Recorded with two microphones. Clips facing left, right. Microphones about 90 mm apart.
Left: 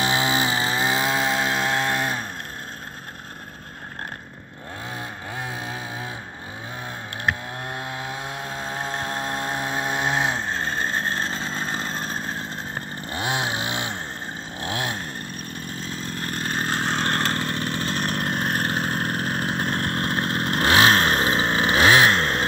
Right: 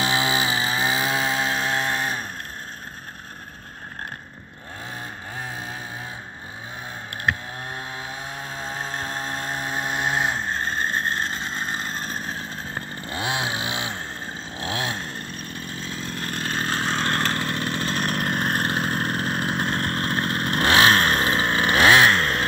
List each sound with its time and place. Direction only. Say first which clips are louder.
0.0 s chainsaw: left 1 dB; 25° left (ahead or behind)
0.3 s chainsaw: left 1 dB; 45° left (ahead or behind)
0.8 s chainsaw: left 2 dB; 60° left (ahead or behind)
8.8 s chainsaw: left 3 dB; 55° left (ahead or behind); by 10.7 s 90° left
12.1 s vehicle: left 1 dB; 35° left (ahead or behind)
13.6 s music: left 1 dB; 10° right (ahead or behind)
14.6 s a sound: even; 20° right (ahead or behind)
16.4 s vehicle: even; 10° left (ahead or behind)
17.3 s vehicle: even; 5° right (ahead or behind)
19.7 s motorcycle: even; 10° left (ahead or behind)